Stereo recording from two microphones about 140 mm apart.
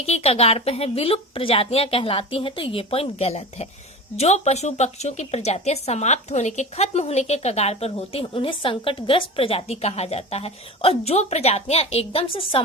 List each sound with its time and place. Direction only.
0.0 s a woman's voice: 45° left (ahead or behind)